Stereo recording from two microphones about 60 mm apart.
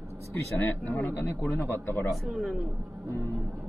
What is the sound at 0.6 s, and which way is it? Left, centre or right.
Speech, left.